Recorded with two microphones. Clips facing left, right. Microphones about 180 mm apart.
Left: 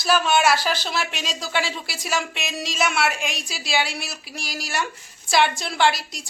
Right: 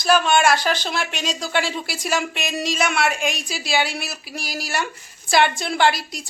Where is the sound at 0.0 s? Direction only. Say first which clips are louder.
Right 2 dB; 5° left (ahead or behind).